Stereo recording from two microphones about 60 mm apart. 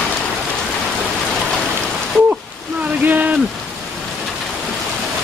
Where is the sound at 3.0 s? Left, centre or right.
Right.